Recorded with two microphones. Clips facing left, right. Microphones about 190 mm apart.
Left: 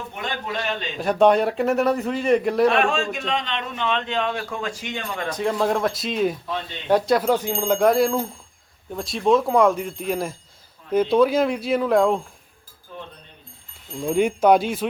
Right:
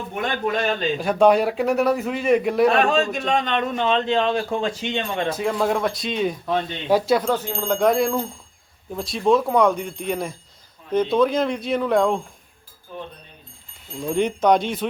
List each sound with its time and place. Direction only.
0.1 s a man's voice: 50° right (ahead or behind)
0.9 s a man's voice: centre (ahead or behind)
2.7 s a man's voice: 35° right (ahead or behind)
5.4 s a man's voice: centre (ahead or behind)
14.0 s speech: 5° left (ahead or behind)